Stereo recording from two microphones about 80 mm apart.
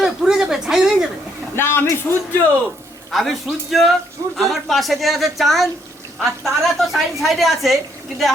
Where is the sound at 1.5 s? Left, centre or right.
Left.